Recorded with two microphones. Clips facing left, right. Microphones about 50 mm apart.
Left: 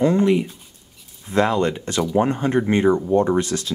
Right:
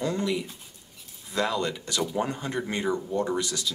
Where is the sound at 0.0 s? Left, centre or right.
Left.